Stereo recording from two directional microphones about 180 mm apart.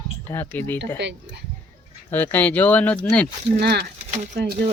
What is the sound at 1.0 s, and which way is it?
Speech, 75° right (ahead or behind).